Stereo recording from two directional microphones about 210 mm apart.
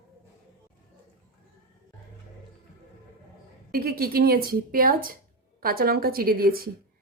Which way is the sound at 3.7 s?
45° right (ahead or behind).